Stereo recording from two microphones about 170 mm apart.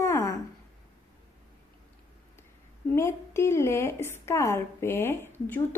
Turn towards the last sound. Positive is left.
turn(degrees=10)  # may be behind; listen again after turning